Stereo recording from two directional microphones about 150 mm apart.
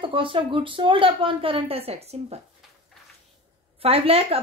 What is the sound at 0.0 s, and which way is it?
Speech, 35° right (ahead or behind).